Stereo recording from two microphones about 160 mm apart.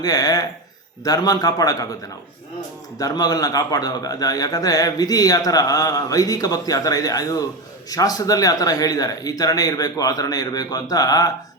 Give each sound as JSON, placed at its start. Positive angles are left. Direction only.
{"t": 0.0, "sound": "a man's voice", "side_deg": 25}
{"t": 3.0, "sound": "a man's voice", "side_deg": 25}